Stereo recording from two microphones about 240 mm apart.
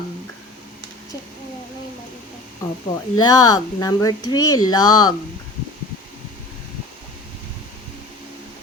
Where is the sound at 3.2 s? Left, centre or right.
Centre.